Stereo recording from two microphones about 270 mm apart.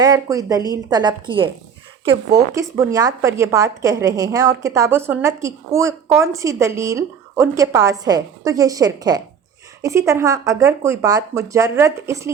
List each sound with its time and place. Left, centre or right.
0.0 s a woman's voice: centre